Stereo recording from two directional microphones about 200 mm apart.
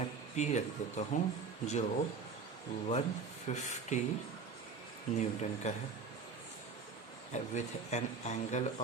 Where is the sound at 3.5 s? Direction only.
35° left (ahead or behind).